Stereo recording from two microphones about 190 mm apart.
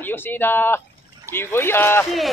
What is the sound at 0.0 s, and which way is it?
Speech, 10° left (ahead or behind).